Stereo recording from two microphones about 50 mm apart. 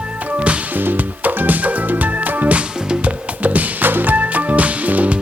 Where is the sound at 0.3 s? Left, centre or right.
Right.